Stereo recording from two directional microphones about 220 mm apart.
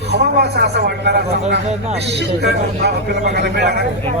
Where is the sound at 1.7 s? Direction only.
30° right (ahead or behind).